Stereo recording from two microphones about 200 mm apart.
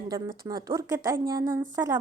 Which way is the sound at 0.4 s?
20° right (ahead or behind).